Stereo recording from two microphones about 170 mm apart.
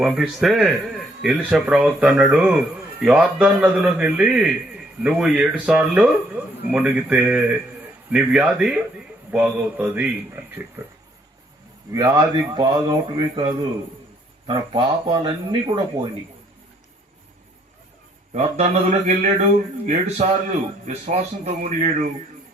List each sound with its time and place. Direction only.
0.0 s a man's voice: centre (ahead or behind)
11.9 s speech: 20° right (ahead or behind)
18.3 s speech: 40° right (ahead or behind)